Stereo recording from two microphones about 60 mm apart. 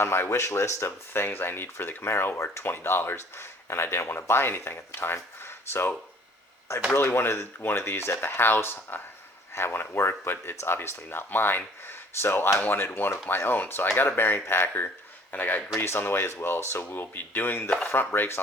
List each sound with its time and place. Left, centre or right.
0.0 s speech: left
6.9 s speech: left
12.9 s speech: left
15.3 s speech: left
15.8 s speech: left